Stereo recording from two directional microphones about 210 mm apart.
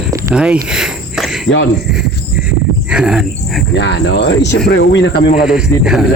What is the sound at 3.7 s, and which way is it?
Speech, 55° left (ahead or behind).